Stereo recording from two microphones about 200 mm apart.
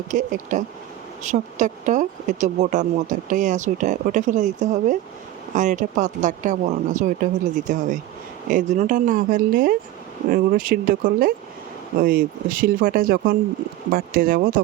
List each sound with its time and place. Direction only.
0.1 s speech: 40° right (ahead or behind)